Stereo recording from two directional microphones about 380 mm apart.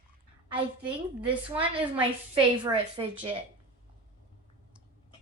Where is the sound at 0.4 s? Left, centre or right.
Centre.